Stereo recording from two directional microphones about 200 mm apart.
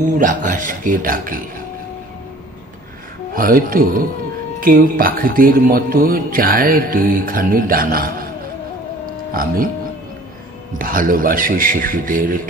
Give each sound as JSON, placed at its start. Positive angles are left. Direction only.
{"t": 0.2, "sound": "speech", "side_deg": -40}
{"t": 3.3, "sound": "speech", "side_deg": -45}
{"t": 9.3, "sound": "speech", "side_deg": -45}
{"t": 10.8, "sound": "speech", "side_deg": -45}